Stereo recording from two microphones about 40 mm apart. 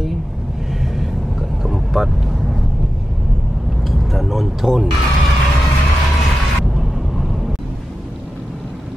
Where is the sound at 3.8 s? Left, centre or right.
Centre.